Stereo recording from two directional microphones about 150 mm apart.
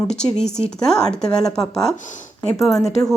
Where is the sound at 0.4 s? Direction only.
45° left (ahead or behind).